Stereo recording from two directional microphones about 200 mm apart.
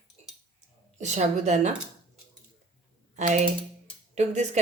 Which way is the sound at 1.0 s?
35° right (ahead or behind).